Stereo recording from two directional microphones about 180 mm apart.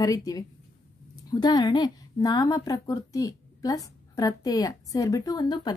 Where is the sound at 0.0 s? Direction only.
20° left (ahead or behind).